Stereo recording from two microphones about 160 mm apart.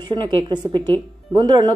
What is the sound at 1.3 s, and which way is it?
Speech, 25° right (ahead or behind).